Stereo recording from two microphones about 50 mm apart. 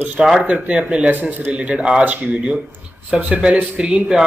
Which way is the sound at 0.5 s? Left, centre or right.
Right.